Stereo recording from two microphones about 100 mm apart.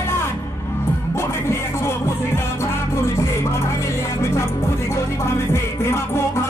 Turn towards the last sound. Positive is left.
turn(degrees=25)  # may be behind; listen again after turning